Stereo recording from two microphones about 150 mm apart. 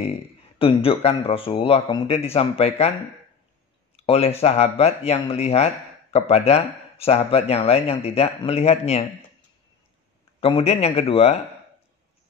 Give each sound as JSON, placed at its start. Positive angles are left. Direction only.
{"t": 0.6, "sound": "speech", "side_deg": 40}
{"t": 3.9, "sound": "speech", "side_deg": 40}
{"t": 10.4, "sound": "speech", "side_deg": 40}